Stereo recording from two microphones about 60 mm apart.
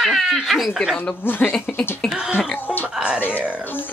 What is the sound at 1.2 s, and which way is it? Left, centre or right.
Speech, left.